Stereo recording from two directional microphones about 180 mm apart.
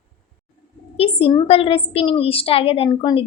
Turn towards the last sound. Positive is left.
turn(degrees=25)  # may be behind; listen again after turning